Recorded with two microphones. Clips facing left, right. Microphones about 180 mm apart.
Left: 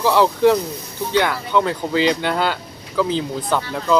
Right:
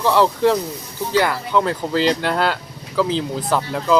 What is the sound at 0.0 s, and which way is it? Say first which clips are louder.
Speech: left 1 dB; centre (ahead or behind).